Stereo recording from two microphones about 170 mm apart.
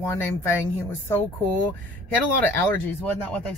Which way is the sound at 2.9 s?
10° left (ahead or behind).